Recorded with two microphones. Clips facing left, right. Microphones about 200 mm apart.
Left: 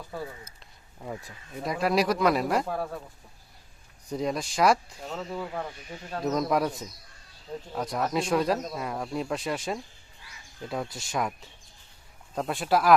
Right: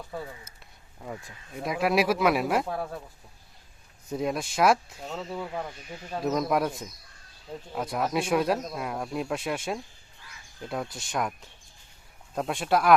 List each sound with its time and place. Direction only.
1.0 s speech: centre (ahead or behind)
4.1 s speech: 5° right (ahead or behind)